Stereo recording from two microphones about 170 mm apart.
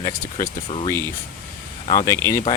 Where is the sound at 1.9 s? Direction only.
20° left (ahead or behind).